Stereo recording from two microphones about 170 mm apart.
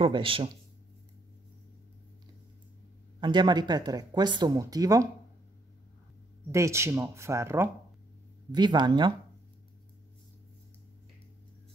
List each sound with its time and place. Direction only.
0.0 s speech: 30° right (ahead or behind)
3.2 s speech: 25° right (ahead or behind)
6.5 s speech: 15° right (ahead or behind)
8.5 s speech: 25° right (ahead or behind)